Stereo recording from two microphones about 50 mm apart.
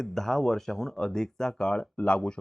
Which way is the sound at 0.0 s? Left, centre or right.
Centre.